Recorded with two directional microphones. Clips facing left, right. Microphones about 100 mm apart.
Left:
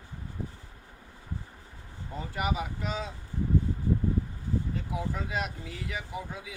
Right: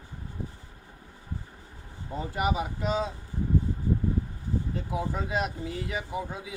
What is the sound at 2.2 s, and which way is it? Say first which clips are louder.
Speech: right 3 dB; 25° right (ahead or behind).